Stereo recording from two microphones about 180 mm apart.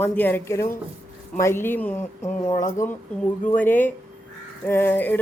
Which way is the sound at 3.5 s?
10° left (ahead or behind).